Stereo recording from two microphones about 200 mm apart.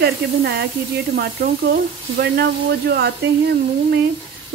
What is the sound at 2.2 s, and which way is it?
A woman's voice, 50° right (ahead or behind).